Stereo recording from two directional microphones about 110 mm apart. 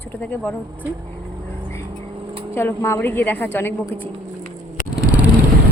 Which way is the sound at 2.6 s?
20° left (ahead or behind).